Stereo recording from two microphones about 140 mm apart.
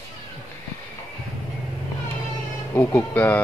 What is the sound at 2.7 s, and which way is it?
Speech, 15° left (ahead or behind).